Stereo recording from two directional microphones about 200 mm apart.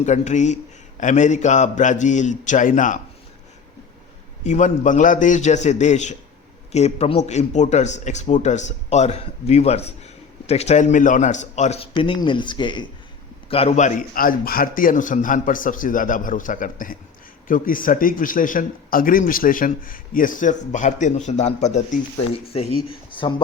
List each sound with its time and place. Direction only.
0.0 s a man's voice: 35° left (ahead or behind)
4.4 s a man's voice: 35° left (ahead or behind)